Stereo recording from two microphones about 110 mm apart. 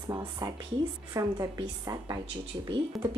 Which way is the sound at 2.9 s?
Centre (ahead or behind).